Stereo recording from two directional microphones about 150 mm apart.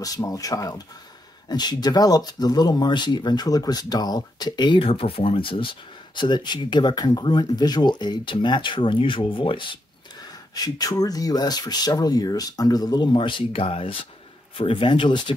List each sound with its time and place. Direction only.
0.0 s speech: 25° left (ahead or behind)